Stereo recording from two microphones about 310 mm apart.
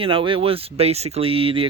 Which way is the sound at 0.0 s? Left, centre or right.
Centre.